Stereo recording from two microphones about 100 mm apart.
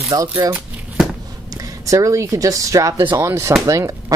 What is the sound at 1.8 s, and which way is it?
Speech, 35° right (ahead or behind).